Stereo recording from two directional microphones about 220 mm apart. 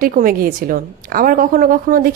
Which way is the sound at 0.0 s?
40° right (ahead or behind).